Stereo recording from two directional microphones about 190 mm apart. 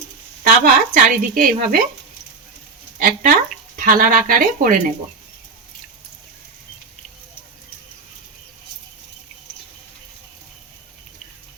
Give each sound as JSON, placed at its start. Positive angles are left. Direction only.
{"t": 0.6, "sound": "speech", "side_deg": -50}
{"t": 3.0, "sound": "speech", "side_deg": -45}